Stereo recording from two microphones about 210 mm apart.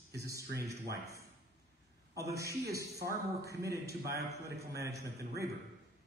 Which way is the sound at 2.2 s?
15° right (ahead or behind).